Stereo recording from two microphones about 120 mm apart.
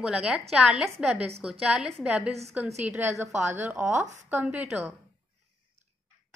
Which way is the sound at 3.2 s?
20° right (ahead or behind).